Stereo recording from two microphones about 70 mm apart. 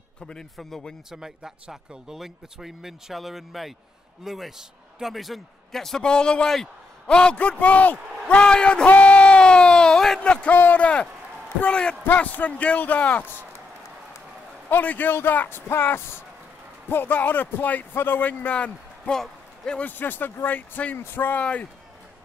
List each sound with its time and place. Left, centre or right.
0.2 s a man's voice: centre
1.1 s a man's voice: centre; by 13.5 s left
14.7 s a man's voice: left; by 19.8 s centre
19.8 s speech: left